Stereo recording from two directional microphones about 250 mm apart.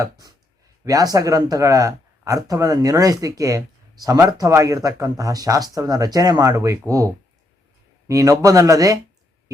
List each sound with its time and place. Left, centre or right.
0.0 s speech: centre